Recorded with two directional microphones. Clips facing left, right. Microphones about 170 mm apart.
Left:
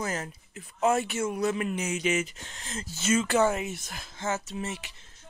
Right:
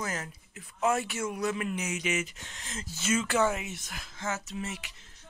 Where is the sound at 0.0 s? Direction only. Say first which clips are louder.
Left 3 dB; 30° left (ahead or behind).